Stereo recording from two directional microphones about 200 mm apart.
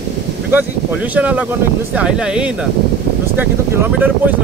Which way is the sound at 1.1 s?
5° right (ahead or behind).